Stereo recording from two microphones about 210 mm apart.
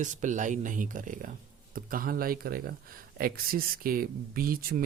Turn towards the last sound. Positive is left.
turn(degrees=-45)  # may be behind; listen again after turning